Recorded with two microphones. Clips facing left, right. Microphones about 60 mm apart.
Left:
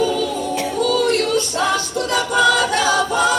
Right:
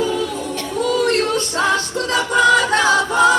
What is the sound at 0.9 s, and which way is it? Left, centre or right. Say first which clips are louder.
Music: right 1 dB; right.